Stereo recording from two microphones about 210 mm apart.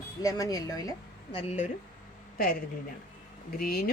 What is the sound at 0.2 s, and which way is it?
A woman's voice, 15° left (ahead or behind).